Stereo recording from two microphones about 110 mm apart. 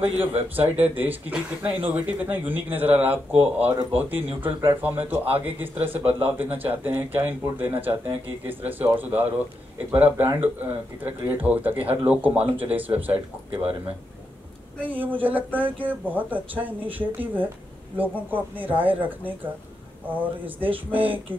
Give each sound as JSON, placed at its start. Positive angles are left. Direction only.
{"t": 0.6, "sound": "speech", "side_deg": -15}
{"t": 14.8, "sound": "speech", "side_deg": -15}